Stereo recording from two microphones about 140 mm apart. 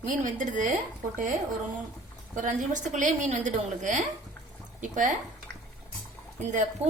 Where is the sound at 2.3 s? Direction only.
65° right (ahead or behind).